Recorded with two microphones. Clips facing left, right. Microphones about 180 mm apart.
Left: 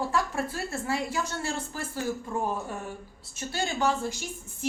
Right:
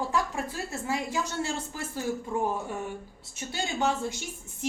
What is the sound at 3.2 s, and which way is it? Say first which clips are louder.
A woman's voice: left 4 dB; 20° right (ahead or behind).